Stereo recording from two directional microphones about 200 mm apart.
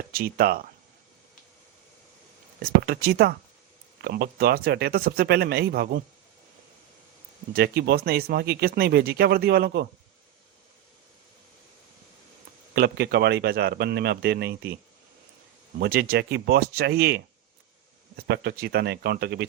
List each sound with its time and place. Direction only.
0.1 s speech: 50° right (ahead or behind)
2.6 s speech: 50° right (ahead or behind)
7.5 s speech: 50° right (ahead or behind)
12.7 s speech: 50° right (ahead or behind)
15.8 s speech: 50° right (ahead or behind)